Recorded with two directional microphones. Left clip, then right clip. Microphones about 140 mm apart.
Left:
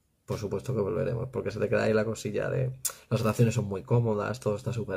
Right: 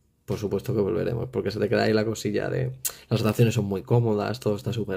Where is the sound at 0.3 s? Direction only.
30° right (ahead or behind).